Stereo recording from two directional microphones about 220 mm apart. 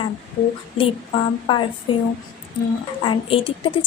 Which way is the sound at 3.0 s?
25° left (ahead or behind).